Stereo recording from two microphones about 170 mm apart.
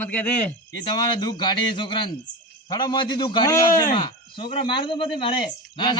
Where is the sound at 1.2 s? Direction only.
25° left (ahead or behind).